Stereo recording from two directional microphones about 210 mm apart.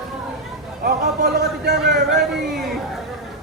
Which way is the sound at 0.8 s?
45° right (ahead or behind).